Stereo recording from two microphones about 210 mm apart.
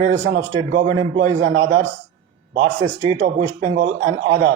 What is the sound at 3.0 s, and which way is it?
Mantra, 35° right (ahead or behind).